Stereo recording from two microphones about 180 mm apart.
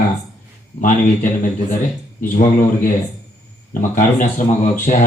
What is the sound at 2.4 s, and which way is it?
Speech, 50° left (ahead or behind).